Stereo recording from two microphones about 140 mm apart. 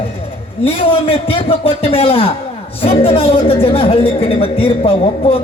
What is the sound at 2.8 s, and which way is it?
A man's voice, 45° left (ahead or behind).